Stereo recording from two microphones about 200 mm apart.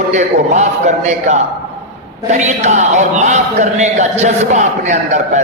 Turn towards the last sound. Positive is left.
turn(degrees=-35)  # may be behind; listen again after turning